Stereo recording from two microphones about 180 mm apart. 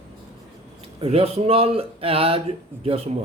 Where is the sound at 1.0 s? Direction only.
35° right (ahead or behind).